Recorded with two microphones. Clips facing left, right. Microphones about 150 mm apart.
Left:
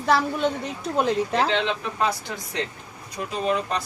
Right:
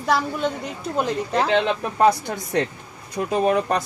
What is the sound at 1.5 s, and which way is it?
Speech, 50° right (ahead or behind).